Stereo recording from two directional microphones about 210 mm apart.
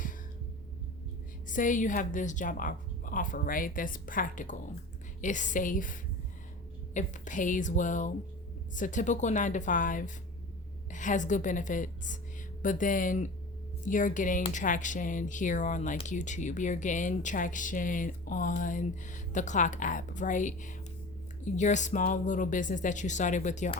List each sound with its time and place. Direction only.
1.5 s speech: 40° left (ahead or behind)